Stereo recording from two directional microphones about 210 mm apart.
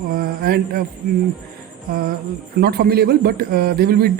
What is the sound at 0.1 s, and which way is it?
Speech, 45° right (ahead or behind).